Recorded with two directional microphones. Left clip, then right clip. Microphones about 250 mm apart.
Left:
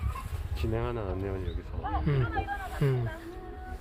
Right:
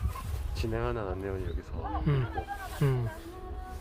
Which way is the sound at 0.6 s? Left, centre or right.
Right.